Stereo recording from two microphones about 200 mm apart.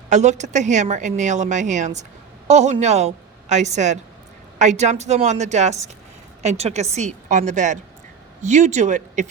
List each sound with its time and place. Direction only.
0.1 s a woman's voice: 35° right (ahead or behind)